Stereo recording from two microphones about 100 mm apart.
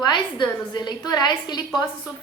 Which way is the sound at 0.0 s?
50° left (ahead or behind).